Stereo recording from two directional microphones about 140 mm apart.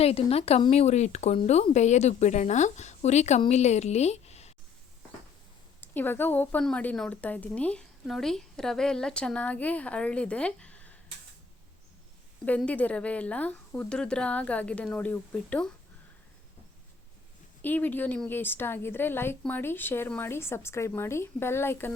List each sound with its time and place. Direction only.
0.0 s a woman's voice: 45° left (ahead or behind)
5.8 s speech: 15° left (ahead or behind)
12.5 s speech: 10° left (ahead or behind)
17.6 s speech: 10° left (ahead or behind)